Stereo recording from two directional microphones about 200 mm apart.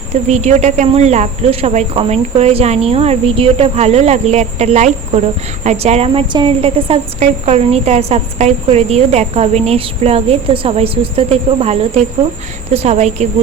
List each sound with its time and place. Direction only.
0.3 s a woman's voice: 35° right (ahead or behind)